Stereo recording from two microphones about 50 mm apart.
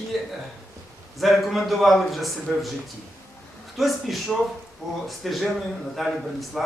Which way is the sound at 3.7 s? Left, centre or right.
Centre.